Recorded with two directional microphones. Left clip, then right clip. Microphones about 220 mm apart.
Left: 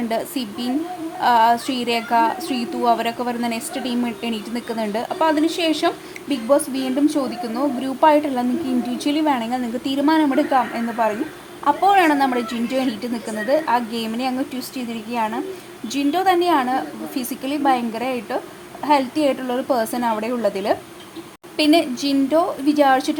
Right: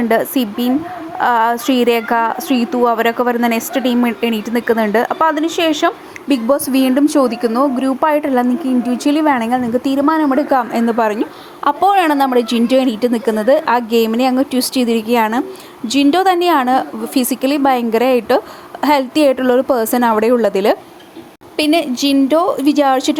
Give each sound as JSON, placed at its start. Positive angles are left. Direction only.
{"t": 0.1, "sound": "a woman's voice", "side_deg": -25}
{"t": 10.5, "sound": "a woman's voice", "side_deg": -30}